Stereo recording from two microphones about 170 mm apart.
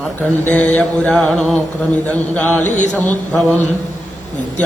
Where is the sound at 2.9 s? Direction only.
5° left (ahead or behind).